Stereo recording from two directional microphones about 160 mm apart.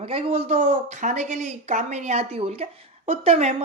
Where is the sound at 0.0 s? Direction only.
35° right (ahead or behind).